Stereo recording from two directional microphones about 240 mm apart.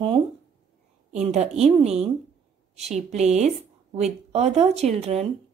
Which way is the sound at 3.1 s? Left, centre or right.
Right.